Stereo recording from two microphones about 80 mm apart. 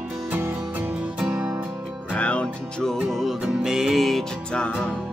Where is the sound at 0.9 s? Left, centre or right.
Centre.